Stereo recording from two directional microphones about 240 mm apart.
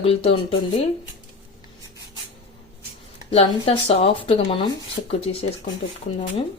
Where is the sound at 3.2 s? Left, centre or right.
Left.